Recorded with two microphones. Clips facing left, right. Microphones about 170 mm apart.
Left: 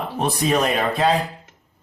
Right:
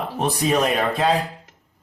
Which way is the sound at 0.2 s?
Centre (ahead or behind).